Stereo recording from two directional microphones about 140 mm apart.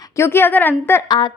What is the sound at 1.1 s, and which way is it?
Speech, 35° left (ahead or behind).